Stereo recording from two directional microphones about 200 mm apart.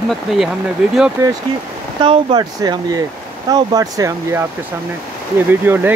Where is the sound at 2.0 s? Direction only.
25° right (ahead or behind).